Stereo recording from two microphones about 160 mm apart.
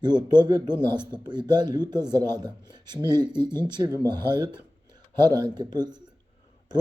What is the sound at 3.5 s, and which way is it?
Speech, 15° left (ahead or behind).